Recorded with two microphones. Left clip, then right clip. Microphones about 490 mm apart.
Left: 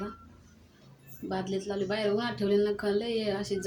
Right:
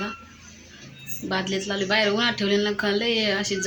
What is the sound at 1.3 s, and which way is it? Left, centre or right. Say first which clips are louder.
Speech: right 7 dB; left.